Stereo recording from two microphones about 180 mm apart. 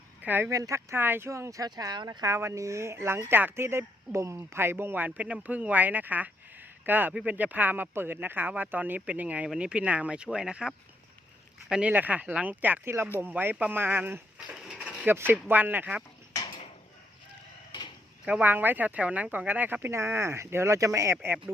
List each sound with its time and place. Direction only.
0.2 s speech: 10° right (ahead or behind)
16.3 s a sound: 20° left (ahead or behind)
18.3 s speech: 10° right (ahead or behind)